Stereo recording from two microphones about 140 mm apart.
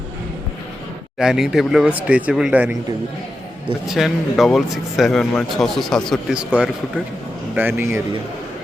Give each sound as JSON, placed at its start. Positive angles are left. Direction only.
{"t": 1.2, "sound": "speech", "side_deg": -5}
{"t": 3.8, "sound": "speech", "side_deg": 0}